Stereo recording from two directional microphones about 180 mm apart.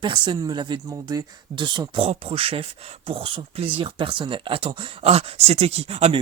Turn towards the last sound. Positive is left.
turn(degrees=-35)  # may be behind; listen again after turning